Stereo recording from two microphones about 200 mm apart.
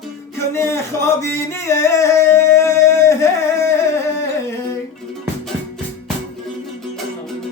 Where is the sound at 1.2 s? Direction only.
15° left (ahead or behind).